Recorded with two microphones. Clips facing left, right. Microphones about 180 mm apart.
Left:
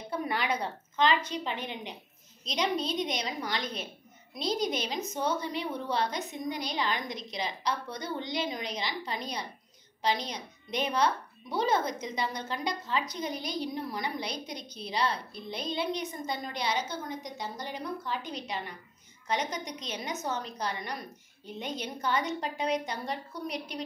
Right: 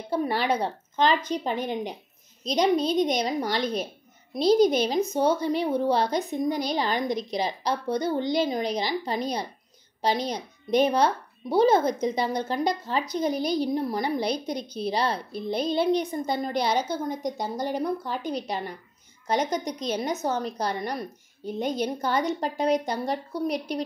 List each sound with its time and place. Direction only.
0.1 s a woman's voice: 35° right (ahead or behind)
19.2 s a woman's voice: 40° right (ahead or behind)